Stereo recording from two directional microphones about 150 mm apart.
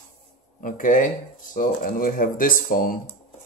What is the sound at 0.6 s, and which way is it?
Speech, 60° left (ahead or behind).